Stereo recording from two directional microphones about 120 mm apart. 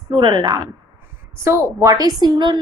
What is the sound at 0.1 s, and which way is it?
A woman's voice, 40° right (ahead or behind).